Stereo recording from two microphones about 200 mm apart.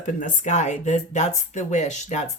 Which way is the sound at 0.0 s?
40° left (ahead or behind).